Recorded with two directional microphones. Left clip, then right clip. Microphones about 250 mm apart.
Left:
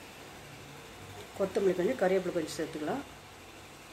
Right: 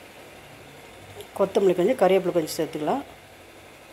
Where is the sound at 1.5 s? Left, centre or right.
Right.